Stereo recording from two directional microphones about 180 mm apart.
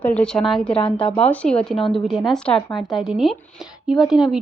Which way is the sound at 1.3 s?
5° left (ahead or behind).